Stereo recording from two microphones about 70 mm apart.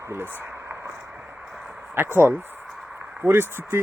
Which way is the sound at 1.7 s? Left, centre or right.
Right.